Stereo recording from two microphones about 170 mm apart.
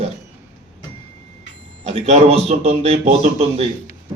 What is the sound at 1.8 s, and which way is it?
Speech, 40° right (ahead or behind).